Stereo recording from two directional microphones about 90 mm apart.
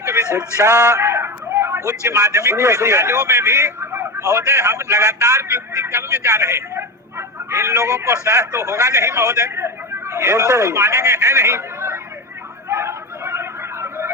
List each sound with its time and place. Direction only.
0.0 s a sound: 30° right (ahead or behind)
1.9 s a man's voice: 35° right (ahead or behind)
12.6 s chatter: 30° right (ahead or behind)